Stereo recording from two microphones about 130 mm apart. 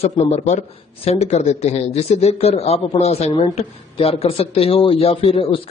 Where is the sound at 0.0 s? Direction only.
55° left (ahead or behind).